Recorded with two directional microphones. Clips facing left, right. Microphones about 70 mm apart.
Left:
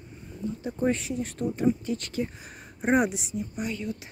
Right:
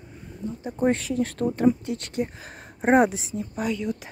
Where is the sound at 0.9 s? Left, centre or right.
Right.